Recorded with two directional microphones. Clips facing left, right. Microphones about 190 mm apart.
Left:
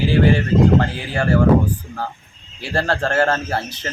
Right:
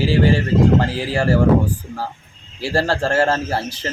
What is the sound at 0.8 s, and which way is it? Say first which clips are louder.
Speech: right 2 dB; 30° right (ahead or behind).